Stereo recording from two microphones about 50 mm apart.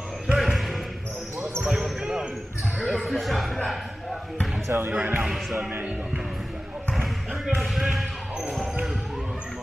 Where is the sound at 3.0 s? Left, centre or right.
Centre.